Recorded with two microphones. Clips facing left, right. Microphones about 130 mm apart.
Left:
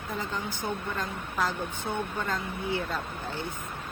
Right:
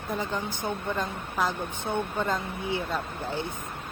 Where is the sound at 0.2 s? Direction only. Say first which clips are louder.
Right 2 dB; 15° right (ahead or behind).